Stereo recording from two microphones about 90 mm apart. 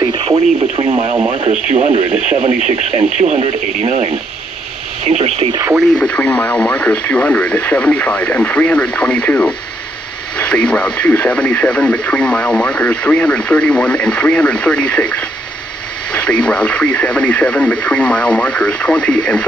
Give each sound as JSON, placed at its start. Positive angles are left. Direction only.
{"t": 0.1, "sound": "radio", "side_deg": -90}
{"t": 0.4, "sound": "speech", "side_deg": -10}
{"t": 5.9, "sound": "speech", "side_deg": 15}